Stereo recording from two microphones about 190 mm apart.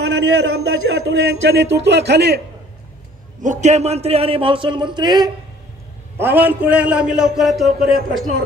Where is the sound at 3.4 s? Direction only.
35° right (ahead or behind); by 5.3 s 20° right (ahead or behind).